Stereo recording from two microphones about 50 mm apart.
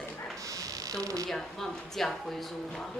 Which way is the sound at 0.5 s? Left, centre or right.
Right.